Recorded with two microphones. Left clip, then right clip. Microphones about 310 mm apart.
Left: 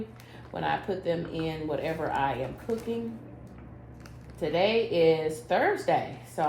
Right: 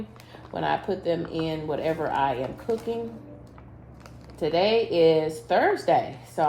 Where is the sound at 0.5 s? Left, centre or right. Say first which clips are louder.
Right 3 dB; right.